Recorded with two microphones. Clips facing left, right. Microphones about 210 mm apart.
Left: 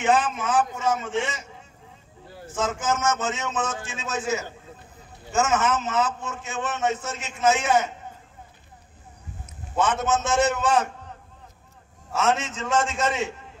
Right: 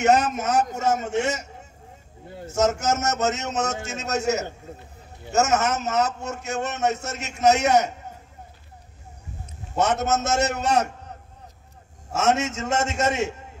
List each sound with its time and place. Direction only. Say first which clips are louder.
0.0 s a man's voice: right 3 dB; 45° right (ahead or behind)
9.8 s a man's voice: right 1 dB; 40° right (ahead or behind)
12.1 s a man's voice: right 2 dB; 45° right (ahead or behind)